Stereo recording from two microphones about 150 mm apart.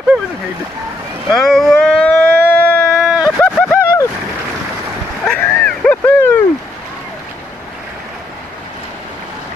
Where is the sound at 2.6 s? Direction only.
10° left (ahead or behind).